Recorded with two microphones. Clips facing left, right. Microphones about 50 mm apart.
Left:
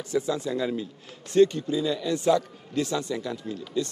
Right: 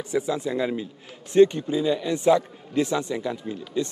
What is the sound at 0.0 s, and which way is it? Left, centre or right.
A man's voice, right.